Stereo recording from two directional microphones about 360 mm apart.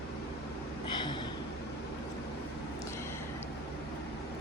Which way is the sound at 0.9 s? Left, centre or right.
Centre.